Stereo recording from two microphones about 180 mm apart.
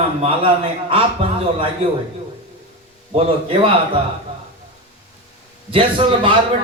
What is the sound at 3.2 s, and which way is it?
Speech, 30° right (ahead or behind).